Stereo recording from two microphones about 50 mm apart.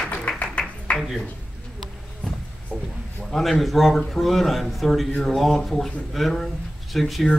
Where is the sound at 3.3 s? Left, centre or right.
Centre.